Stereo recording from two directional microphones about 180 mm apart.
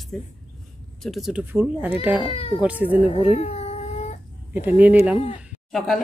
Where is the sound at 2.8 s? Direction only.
35° left (ahead or behind).